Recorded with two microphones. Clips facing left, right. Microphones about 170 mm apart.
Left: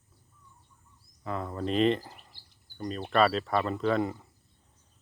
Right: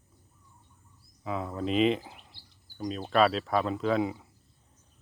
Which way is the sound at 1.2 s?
Centre (ahead or behind).